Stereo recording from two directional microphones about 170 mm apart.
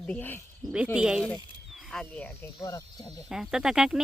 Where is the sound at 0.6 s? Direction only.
5° right (ahead or behind).